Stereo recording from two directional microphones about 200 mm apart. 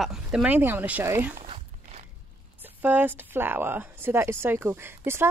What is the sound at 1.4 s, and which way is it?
Walk, 30° right (ahead or behind).